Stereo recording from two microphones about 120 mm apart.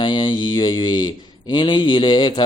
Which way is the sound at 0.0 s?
40° left (ahead or behind).